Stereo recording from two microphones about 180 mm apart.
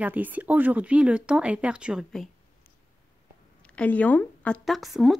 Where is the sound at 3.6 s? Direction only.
5° left (ahead or behind).